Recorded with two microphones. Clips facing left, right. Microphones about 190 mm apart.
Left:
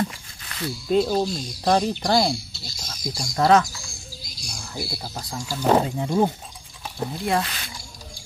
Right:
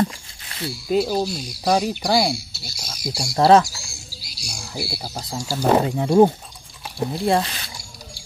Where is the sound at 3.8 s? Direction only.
75° right (ahead or behind).